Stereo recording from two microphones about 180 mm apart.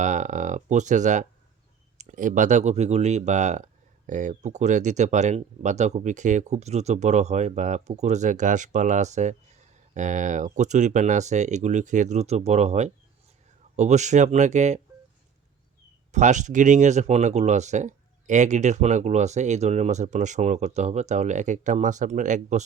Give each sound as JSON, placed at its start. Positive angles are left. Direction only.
{"t": 0.0, "sound": "speech", "side_deg": -45}
{"t": 16.1, "sound": "speech", "side_deg": -40}